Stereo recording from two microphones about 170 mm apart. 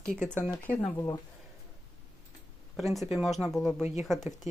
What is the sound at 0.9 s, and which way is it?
Speech, 20° left (ahead or behind).